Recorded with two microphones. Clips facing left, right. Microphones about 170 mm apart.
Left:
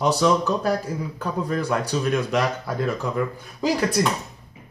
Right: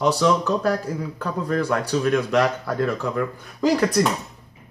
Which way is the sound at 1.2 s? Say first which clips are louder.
Right 2 dB; 15° left (ahead or behind).